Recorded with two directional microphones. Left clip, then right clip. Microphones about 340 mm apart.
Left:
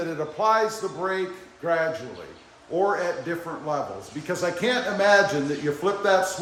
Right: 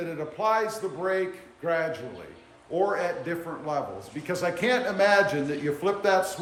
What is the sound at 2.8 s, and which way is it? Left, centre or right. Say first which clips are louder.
Speech: left 3 dB; centre.